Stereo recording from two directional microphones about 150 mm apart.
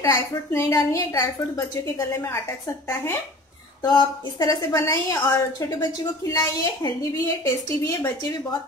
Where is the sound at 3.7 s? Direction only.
30° left (ahead or behind).